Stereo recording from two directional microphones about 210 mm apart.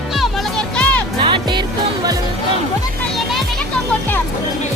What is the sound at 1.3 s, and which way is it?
Music, 20° right (ahead or behind).